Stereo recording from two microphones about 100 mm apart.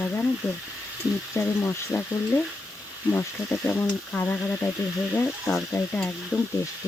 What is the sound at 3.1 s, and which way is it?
Speech, 25° left (ahead or behind).